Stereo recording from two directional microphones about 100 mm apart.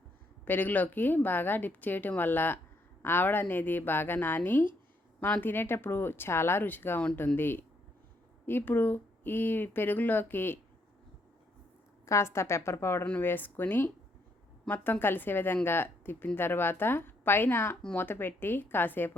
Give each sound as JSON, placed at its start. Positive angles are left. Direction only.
{"t": 0.4, "sound": "a woman's voice", "side_deg": 20}
{"t": 12.0, "sound": "a woman's voice", "side_deg": 30}